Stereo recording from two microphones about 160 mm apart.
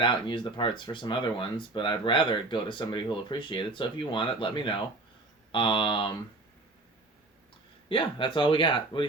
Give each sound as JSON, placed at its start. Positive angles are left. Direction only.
{"t": 0.0, "sound": "speech", "side_deg": 30}
{"t": 7.9, "sound": "speech", "side_deg": 30}